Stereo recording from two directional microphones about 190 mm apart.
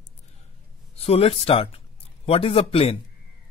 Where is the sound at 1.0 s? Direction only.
30° left (ahead or behind).